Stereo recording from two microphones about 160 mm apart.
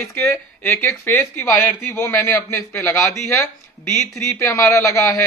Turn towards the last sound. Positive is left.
turn(degrees=15)  # may be behind; listen again after turning